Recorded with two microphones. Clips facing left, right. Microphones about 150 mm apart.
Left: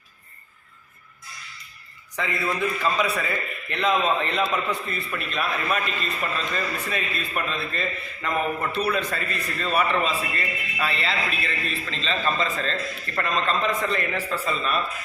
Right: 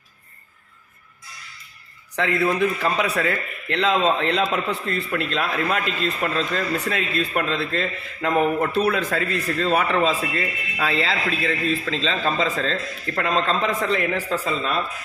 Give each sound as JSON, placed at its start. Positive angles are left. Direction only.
{"t": 2.1, "sound": "a man's voice", "side_deg": -75}
{"t": 3.7, "sound": "a man's voice", "side_deg": -85}
{"t": 4.9, "sound": "a man's voice", "side_deg": -85}
{"t": 8.8, "sound": "a man's voice", "side_deg": -90}